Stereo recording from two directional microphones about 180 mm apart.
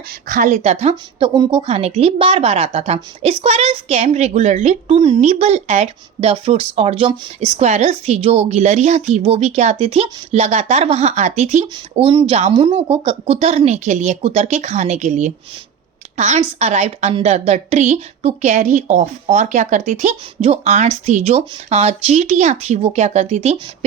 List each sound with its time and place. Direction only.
0.3 s a woman's voice: 45° right (ahead or behind)